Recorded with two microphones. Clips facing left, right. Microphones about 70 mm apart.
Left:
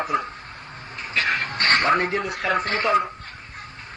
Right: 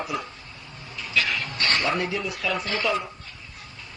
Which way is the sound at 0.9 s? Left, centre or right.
Left.